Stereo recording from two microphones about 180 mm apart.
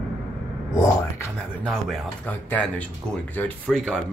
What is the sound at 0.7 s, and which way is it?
Speech, 15° left (ahead or behind).